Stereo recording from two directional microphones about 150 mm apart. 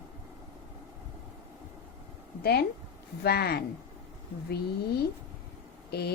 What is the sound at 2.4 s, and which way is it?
Speech, 90° left.